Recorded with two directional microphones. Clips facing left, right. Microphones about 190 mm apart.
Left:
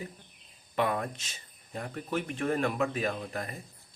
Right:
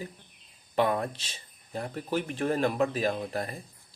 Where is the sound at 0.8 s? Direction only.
30° right (ahead or behind).